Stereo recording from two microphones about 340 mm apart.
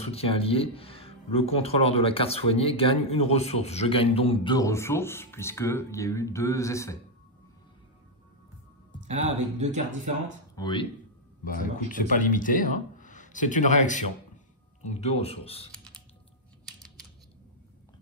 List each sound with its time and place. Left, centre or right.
0.0 s speech: centre
9.2 s speech: right
10.5 s speech: centre
11.4 s speech: left
15.7 s typing: centre